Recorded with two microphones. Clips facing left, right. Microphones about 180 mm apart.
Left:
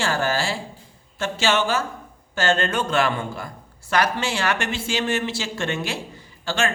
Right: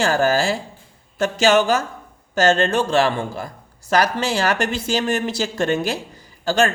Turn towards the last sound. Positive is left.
turn(degrees=-40)  # may be behind; listen again after turning